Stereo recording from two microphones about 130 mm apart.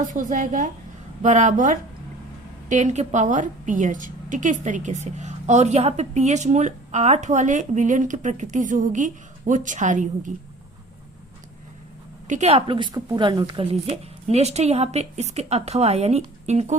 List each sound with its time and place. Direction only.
0.1 s a woman's voice: 85° right
2.6 s a woman's voice: 65° right (ahead or behind)
12.3 s a woman's voice: 60° right (ahead or behind); by 13.7 s 35° right (ahead or behind)
13.7 s a woman's voice: 50° right (ahead or behind)